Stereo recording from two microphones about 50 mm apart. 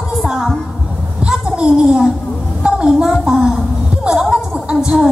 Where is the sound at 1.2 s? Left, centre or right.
Centre.